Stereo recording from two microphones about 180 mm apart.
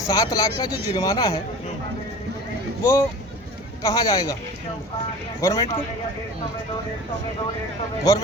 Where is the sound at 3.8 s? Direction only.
20° left (ahead or behind).